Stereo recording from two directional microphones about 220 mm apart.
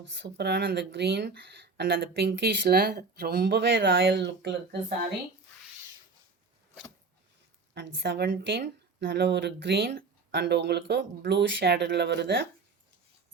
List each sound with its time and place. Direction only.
0.1 s speech: 50° right (ahead or behind)
7.9 s speech: 50° right (ahead or behind)